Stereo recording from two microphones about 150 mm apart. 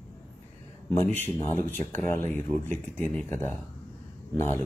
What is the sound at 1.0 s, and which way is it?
Speech, 15° left (ahead or behind).